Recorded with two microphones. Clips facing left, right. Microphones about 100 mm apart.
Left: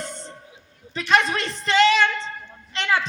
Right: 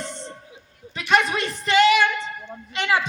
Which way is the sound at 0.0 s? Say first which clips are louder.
Right 1 dB; 5° left (ahead or behind).